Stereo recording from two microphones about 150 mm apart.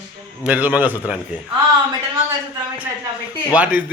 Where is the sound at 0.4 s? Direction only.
10° right (ahead or behind).